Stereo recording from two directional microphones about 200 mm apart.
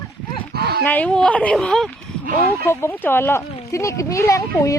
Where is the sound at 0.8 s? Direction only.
10° left (ahead or behind).